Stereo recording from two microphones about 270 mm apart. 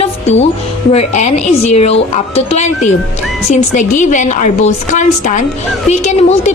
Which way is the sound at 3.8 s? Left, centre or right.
Left.